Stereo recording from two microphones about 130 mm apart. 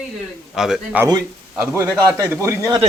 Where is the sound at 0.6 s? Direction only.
5° right (ahead or behind).